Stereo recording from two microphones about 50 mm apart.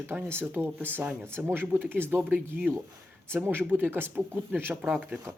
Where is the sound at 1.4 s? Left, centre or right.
Centre.